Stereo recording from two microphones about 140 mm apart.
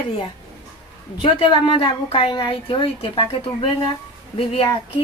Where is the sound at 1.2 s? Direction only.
35° left (ahead or behind).